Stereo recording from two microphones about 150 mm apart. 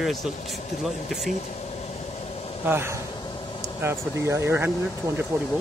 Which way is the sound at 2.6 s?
15° right (ahead or behind).